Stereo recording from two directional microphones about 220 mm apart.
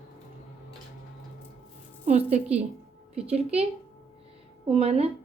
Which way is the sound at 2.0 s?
30° right (ahead or behind).